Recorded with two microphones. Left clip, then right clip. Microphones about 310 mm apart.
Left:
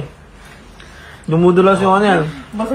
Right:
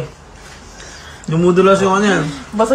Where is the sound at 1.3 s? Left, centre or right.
Centre.